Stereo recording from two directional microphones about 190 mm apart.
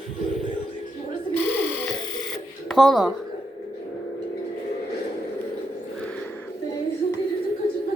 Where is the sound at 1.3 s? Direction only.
10° left (ahead or behind).